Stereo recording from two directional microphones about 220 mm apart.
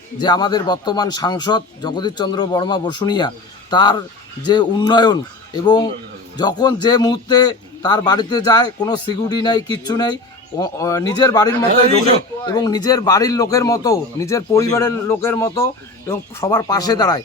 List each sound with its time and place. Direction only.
0.2 s a man's voice: 20° left (ahead or behind)